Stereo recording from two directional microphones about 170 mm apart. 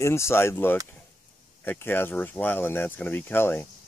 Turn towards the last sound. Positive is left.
turn(degrees=10)  # may be behind; listen again after turning